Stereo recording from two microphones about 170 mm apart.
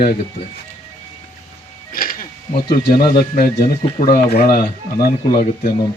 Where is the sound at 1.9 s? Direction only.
55° left (ahead or behind).